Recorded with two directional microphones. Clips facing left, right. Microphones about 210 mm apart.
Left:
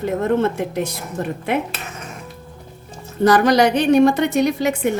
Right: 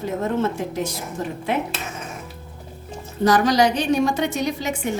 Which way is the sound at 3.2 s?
60° left (ahead or behind).